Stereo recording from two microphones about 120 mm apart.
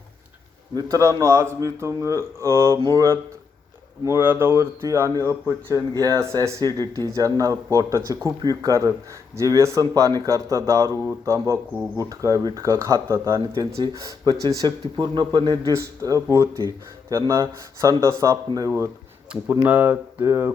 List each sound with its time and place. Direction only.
0.9 s speech: 25° right (ahead or behind)
4.0 s speech: 20° right (ahead or behind)
19.3 s speech: 15° right (ahead or behind)